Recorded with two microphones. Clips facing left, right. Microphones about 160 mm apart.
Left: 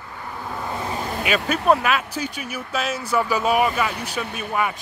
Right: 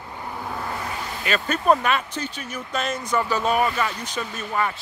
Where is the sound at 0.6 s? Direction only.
25° left (ahead or behind).